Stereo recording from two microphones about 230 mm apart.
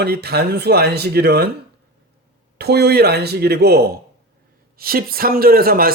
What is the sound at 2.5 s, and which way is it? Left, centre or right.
A man's voice, right.